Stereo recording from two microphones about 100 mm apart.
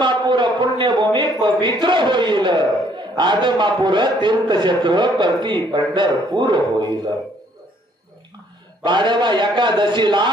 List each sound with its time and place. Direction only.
0.0 s a man's voice: 50° right (ahead or behind)
8.8 s a man's voice: 50° right (ahead or behind)